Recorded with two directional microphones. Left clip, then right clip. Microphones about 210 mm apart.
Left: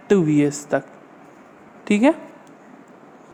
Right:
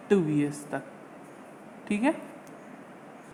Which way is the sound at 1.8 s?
45° left (ahead or behind).